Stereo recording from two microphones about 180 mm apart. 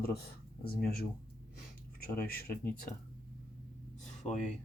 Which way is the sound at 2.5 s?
50° left (ahead or behind).